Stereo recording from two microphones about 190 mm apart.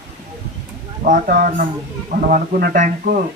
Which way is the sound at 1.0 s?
40° right (ahead or behind).